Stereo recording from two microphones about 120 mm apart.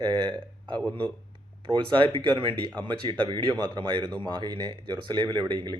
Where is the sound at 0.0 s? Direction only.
35° right (ahead or behind).